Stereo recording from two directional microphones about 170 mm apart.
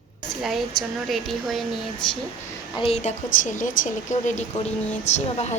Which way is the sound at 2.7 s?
35° left (ahead or behind).